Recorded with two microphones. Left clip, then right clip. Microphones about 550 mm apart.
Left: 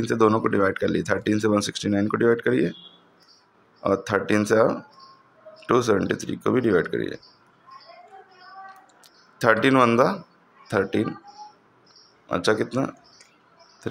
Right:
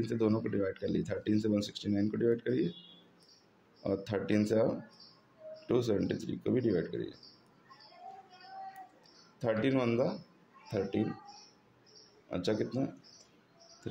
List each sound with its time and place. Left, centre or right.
0.0 s speech: right
3.8 s speech: right
9.4 s speech: right
12.3 s speech: right